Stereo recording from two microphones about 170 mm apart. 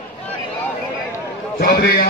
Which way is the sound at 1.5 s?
60° left (ahead or behind).